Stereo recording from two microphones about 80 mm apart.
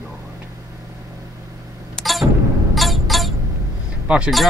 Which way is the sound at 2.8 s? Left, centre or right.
Centre.